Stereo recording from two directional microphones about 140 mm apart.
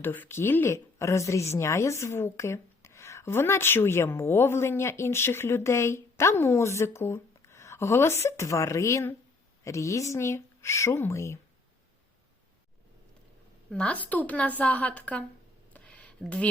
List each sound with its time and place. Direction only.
0.0 s a woman's voice: 15° left (ahead or behind)
13.7 s speech: 10° left (ahead or behind)
15.7 s a sound: 10° left (ahead or behind)